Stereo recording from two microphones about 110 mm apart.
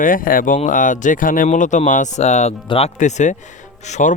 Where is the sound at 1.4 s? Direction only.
90° left.